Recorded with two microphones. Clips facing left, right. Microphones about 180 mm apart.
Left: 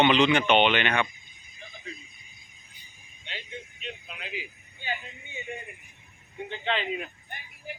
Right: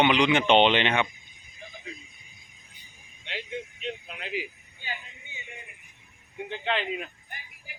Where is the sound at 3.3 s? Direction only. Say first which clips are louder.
Right 6 dB; 75° right (ahead or behind).